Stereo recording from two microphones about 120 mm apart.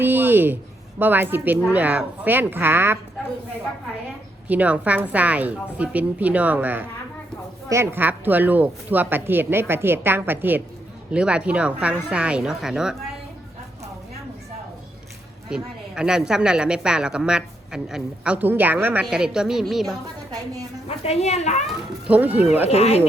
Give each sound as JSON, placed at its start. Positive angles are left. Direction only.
{"t": 0.0, "sound": "speech", "side_deg": -15}
{"t": 4.4, "sound": "speech", "side_deg": -15}
{"t": 15.4, "sound": "speech", "side_deg": -5}
{"t": 20.3, "sound": "a woman's voice", "side_deg": -30}
{"t": 20.8, "sound": "a woman's voice", "side_deg": 60}
{"t": 21.7, "sound": "speech", "side_deg": -10}
{"t": 22.7, "sound": "speech", "side_deg": 60}